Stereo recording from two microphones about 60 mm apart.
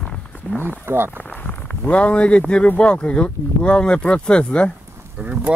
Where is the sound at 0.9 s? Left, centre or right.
Right.